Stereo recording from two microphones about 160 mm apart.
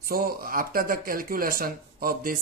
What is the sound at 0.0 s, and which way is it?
Speech, 65° right (ahead or behind).